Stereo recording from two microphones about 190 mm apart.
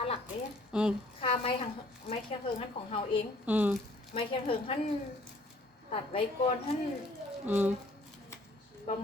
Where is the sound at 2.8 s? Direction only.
30° left (ahead or behind).